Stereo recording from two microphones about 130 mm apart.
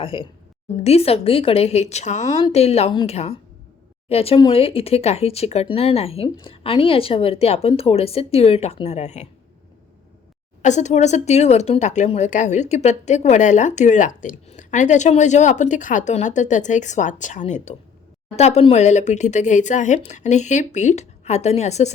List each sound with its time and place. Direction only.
0.0 s a woman's voice: 45° left (ahead or behind); by 2.4 s 65° left (ahead or behind)
2.4 s a woman's voice: 50° left (ahead or behind)
10.6 s speech: 65° left (ahead or behind)